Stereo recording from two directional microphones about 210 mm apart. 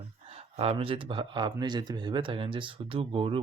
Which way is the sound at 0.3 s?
30° right (ahead or behind).